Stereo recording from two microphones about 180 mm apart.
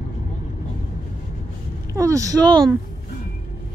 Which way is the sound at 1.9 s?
15° right (ahead or behind).